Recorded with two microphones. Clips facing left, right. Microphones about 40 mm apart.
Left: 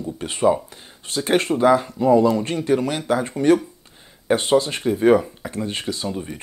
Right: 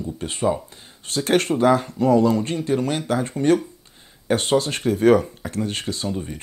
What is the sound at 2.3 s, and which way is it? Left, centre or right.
Speech, left.